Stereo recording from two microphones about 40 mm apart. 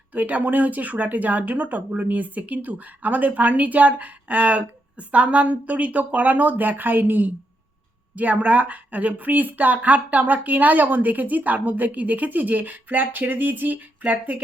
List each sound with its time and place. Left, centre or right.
0.1 s speech: right
8.1 s speech: right